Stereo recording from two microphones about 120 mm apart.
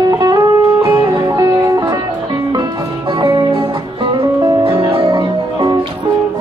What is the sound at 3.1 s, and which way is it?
Music, 35° right (ahead or behind).